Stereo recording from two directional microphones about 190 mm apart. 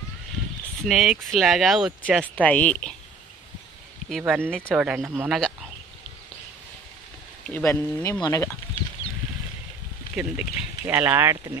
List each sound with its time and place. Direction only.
0.8 s speech: centre (ahead or behind)
2.2 s speech: 10° left (ahead or behind)
4.2 s speech: 10° right (ahead or behind)
7.4 s speech: 10° left (ahead or behind)
10.1 s speech: 5° right (ahead or behind)